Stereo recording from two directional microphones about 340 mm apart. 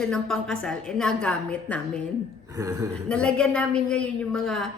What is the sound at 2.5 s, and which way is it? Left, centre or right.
Speech, centre.